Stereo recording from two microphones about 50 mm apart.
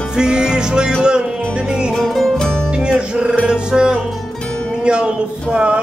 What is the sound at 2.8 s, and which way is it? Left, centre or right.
Music, centre.